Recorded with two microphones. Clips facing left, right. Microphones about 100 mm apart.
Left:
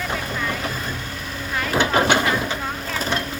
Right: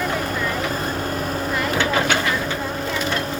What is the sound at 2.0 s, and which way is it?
Vehicle, 20° left (ahead or behind).